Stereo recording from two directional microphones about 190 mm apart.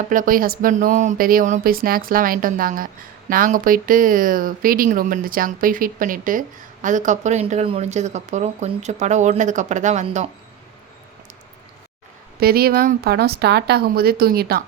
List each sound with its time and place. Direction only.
0.1 s speech: 45° right (ahead or behind)
12.4 s speech: 55° right (ahead or behind)